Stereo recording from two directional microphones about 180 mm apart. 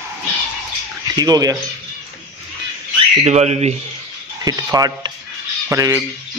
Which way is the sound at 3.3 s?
35° right (ahead or behind).